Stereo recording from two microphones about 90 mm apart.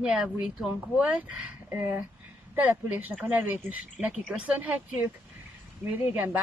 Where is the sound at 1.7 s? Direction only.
25° right (ahead or behind).